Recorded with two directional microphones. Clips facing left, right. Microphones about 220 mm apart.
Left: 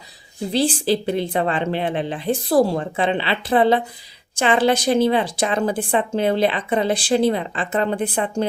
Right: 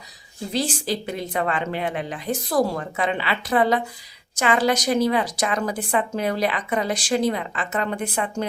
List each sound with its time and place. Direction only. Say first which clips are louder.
0.5 s a woman's voice: left 6 dB; 30° left (ahead or behind)